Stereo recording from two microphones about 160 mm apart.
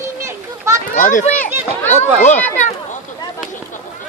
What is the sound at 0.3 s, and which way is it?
Children playing, 15° right (ahead or behind).